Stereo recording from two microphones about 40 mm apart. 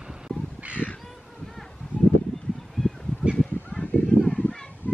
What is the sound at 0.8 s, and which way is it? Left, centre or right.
Crow, right.